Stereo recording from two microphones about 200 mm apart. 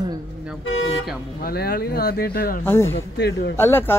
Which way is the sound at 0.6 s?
75° left (ahead or behind).